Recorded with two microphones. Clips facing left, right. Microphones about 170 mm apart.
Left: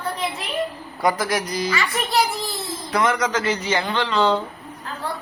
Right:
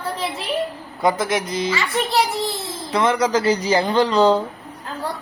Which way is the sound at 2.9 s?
30° right (ahead or behind).